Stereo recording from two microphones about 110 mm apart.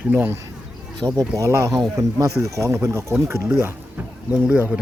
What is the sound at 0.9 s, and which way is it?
Speech, 35° right (ahead or behind).